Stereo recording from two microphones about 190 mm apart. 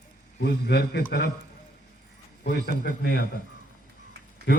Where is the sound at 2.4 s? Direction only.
55° left (ahead or behind).